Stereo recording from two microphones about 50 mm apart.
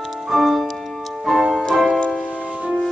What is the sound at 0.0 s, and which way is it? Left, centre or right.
Music, centre.